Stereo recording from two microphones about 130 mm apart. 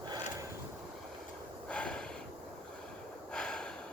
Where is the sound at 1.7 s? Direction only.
5° left (ahead or behind).